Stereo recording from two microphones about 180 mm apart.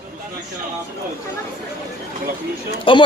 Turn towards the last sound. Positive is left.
turn(degrees=30)  # may be behind; listen again after turning